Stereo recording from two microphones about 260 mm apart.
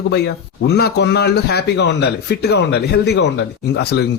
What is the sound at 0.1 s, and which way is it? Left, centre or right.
Speech, left.